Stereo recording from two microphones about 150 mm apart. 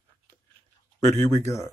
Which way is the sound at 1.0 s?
50° right (ahead or behind).